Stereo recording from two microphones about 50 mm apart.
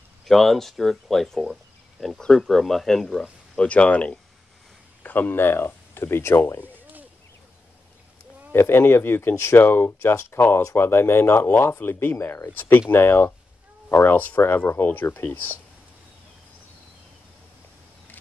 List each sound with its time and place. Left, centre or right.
0.2 s speech: centre
3.5 s speech: left
5.0 s speech: left
6.6 s a sound: right
8.5 s speech: left
10.1 s speech: left
10.7 s speech: left